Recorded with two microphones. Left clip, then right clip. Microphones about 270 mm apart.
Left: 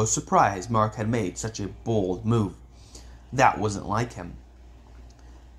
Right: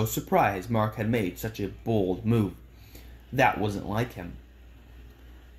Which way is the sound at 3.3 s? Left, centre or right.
Left.